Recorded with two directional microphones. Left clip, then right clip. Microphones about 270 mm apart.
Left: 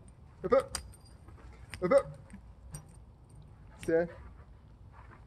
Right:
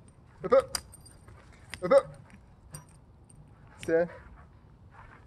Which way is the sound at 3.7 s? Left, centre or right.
Centre.